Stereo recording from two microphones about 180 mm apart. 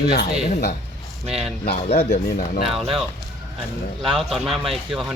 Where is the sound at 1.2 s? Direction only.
35° right (ahead or behind).